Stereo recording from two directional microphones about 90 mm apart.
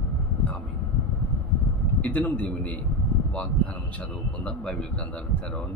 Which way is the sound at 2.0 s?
15° left (ahead or behind).